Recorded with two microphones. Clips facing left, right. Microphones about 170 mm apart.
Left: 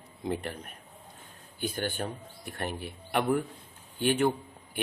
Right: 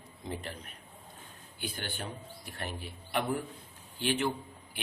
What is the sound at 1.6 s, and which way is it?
A man's voice, 45° left (ahead or behind).